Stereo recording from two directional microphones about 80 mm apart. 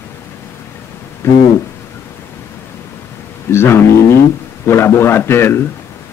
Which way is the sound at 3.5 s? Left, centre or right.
Left.